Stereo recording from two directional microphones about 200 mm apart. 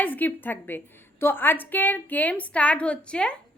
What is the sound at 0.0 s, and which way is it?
A woman's voice, 10° left (ahead or behind).